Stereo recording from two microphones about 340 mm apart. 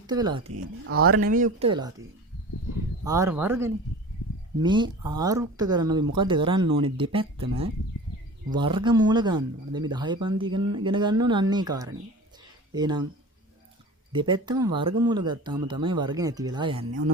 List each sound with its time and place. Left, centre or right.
0.1 s speech: centre
0.5 s speech: right
1.0 s speech: right
3.0 s speech: centre
8.4 s speech: centre
10.6 s speech: right
10.8 s speech: centre
14.1 s speech: centre